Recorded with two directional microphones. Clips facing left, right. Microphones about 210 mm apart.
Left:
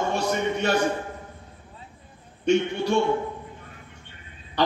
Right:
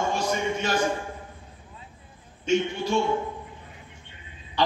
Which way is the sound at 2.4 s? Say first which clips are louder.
Left 3 dB; 65° left (ahead or behind).